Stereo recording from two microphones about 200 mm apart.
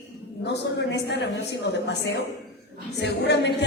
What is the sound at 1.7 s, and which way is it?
Speech, 60° left (ahead or behind).